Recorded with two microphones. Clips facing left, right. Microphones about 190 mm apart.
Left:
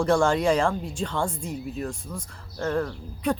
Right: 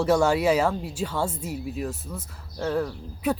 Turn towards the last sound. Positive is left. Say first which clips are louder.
# even
turn(degrees=-5)  # may be behind; listen again after turning